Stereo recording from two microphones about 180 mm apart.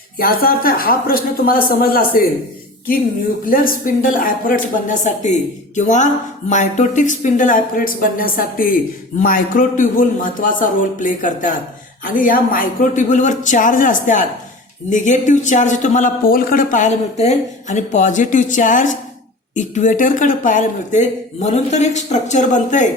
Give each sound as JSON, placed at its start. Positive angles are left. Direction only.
{"t": 0.2, "sound": "speech", "side_deg": 55}
{"t": 3.4, "sound": "speech", "side_deg": 50}